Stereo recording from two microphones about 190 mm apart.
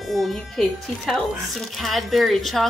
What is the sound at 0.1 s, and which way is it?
Speech, centre (ahead or behind).